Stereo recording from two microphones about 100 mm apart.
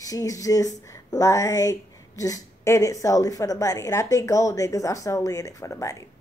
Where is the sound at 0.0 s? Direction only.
35° left (ahead or behind).